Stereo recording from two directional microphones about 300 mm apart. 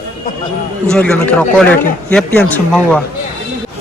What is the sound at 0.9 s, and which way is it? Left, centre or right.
A man's voice, centre.